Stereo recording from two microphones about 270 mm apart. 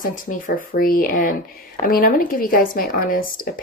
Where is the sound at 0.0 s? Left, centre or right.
Left.